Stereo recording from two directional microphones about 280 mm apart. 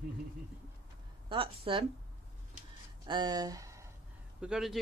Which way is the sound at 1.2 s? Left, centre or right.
Centre.